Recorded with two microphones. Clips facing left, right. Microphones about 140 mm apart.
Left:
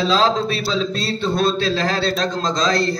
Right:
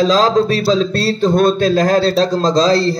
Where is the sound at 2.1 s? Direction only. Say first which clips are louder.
Right 8 dB; 35° right (ahead or behind).